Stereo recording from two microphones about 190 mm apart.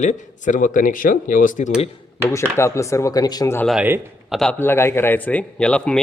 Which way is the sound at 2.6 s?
15° left (ahead or behind).